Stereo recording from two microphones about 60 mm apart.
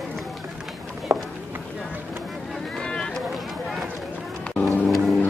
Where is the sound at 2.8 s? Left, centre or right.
Centre.